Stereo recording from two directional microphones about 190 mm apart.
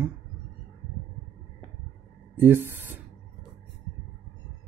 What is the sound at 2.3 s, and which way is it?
Speech, 10° right (ahead or behind).